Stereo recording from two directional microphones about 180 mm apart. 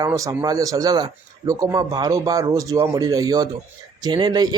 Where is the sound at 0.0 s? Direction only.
20° right (ahead or behind).